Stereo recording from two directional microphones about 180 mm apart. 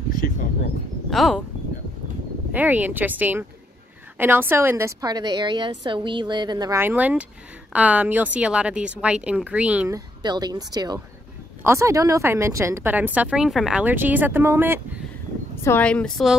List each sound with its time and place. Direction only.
1.1 s speech: centre (ahead or behind)
2.5 s a woman's voice: 10° right (ahead or behind)
6.8 s a woman's voice: 10° right (ahead or behind)
9.9 s a woman's voice: 20° right (ahead or behind)
15.6 s a woman's voice: 10° left (ahead or behind)